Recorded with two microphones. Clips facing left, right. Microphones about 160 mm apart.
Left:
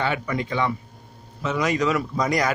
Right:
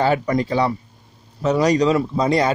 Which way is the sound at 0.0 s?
35° right (ahead or behind).